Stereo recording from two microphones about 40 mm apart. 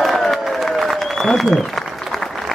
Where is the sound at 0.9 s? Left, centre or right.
Centre.